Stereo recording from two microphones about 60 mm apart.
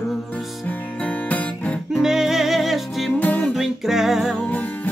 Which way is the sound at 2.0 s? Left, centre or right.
Centre.